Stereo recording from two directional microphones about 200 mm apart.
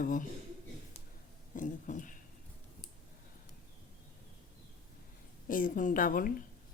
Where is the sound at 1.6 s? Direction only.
40° left (ahead or behind).